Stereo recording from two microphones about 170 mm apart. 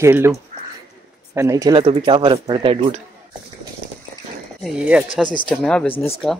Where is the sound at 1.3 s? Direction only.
20° right (ahead or behind).